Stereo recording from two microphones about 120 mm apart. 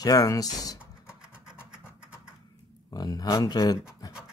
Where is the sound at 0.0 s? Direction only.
30° left (ahead or behind).